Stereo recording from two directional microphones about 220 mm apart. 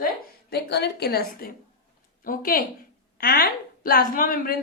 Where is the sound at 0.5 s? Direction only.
50° left (ahead or behind).